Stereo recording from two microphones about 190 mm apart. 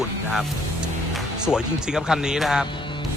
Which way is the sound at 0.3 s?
Centre (ahead or behind).